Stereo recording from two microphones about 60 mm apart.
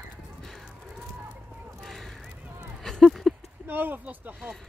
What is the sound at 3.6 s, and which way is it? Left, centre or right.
Speech, right.